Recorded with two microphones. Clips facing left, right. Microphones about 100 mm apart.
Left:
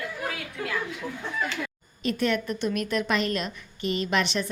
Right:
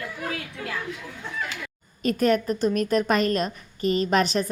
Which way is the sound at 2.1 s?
40° right (ahead or behind).